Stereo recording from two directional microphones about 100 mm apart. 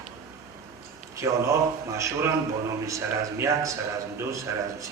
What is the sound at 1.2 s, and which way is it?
Speech, 30° right (ahead or behind).